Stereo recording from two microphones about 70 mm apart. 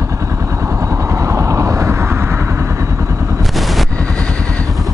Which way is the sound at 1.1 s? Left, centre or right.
Right.